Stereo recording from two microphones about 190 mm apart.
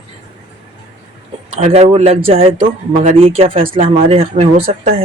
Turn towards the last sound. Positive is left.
turn(degrees=-30)  # may be behind; listen again after turning